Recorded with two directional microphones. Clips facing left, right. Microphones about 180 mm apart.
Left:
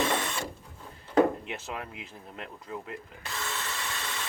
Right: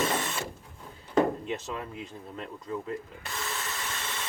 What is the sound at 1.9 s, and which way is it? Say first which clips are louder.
Speech: right 5 dB; 40° right (ahead or behind).